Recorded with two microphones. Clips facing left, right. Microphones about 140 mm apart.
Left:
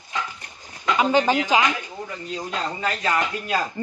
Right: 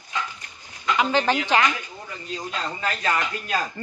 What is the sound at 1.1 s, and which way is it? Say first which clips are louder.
Speech: left 3 dB; 10° left (ahead or behind).